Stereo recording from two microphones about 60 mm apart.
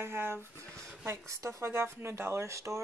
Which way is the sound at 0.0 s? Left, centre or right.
Right.